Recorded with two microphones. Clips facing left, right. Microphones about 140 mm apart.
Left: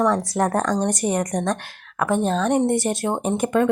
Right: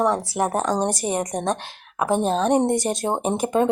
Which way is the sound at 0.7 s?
30° right (ahead or behind).